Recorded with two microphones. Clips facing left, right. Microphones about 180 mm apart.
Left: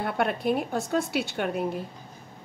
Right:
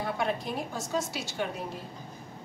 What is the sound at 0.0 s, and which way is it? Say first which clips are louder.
A woman's voice: left 4 dB; 60° left (ahead or behind).